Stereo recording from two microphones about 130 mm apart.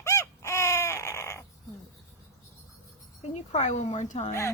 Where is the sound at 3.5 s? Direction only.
65° left (ahead or behind).